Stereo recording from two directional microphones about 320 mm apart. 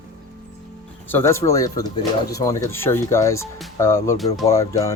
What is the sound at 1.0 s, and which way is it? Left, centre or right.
Speech, centre.